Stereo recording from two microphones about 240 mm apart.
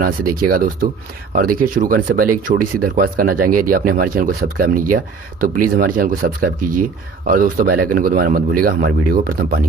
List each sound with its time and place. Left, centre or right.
0.0 s speech: right